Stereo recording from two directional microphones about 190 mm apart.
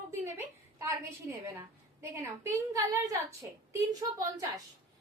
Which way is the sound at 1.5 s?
10° right (ahead or behind).